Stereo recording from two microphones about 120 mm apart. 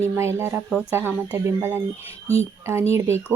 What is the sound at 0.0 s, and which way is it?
Speech, 20° right (ahead or behind).